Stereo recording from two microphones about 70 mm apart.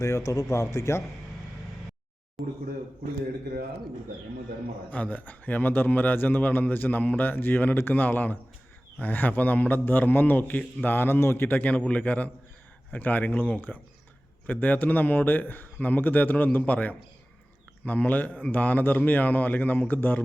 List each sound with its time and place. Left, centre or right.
0.0 s speech: left
2.4 s a man's voice: centre
4.9 s speech: centre